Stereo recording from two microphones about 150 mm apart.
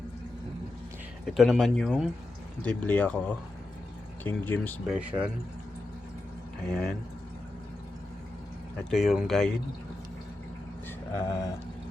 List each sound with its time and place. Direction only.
1.3 s speech: centre (ahead or behind)
4.9 s speech: 10° right (ahead or behind)
6.7 s speech: 5° left (ahead or behind)
8.8 s speech: centre (ahead or behind)
11.3 s a sound: 25° left (ahead or behind)